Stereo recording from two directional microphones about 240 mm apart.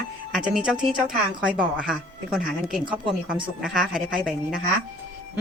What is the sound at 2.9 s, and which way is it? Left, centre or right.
Speech, centre.